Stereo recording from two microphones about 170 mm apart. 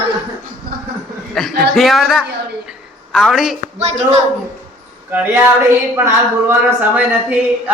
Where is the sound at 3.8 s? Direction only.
40° right (ahead or behind).